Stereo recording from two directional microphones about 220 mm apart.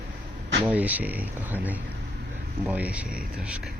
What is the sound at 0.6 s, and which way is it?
Speech, 5° right (ahead or behind).